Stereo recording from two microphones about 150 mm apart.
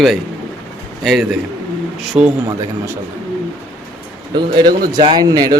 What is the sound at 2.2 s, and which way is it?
Speech, 10° right (ahead or behind).